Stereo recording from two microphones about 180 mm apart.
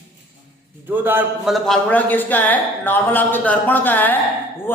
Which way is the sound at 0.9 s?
10° right (ahead or behind).